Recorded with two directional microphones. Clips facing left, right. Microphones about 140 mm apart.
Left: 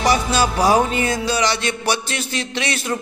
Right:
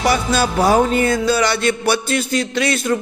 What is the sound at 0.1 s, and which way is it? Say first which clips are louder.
Music: right 1 dB; 55° right (ahead or behind).